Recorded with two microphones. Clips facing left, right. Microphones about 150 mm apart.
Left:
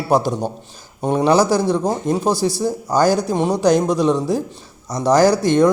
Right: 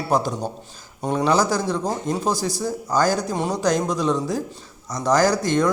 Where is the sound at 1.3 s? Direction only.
30° left (ahead or behind).